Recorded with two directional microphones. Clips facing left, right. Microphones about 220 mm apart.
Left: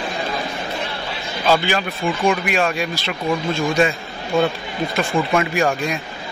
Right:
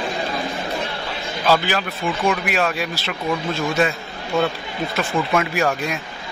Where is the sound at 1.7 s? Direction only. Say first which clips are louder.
Left 2 dB; centre (ahead or behind).